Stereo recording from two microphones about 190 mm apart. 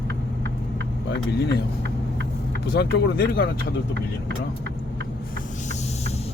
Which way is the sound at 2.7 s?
55° left (ahead or behind).